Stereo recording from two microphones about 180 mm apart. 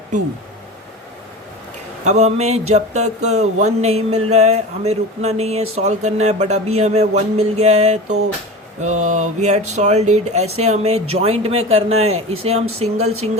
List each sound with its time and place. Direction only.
2.0 s speech: 40° right (ahead or behind)